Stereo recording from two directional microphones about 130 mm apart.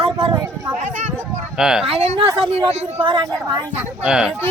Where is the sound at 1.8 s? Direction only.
55° right (ahead or behind).